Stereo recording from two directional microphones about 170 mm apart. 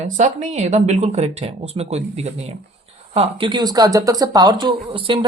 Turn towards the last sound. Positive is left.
turn(degrees=-30)  # may be behind; listen again after turning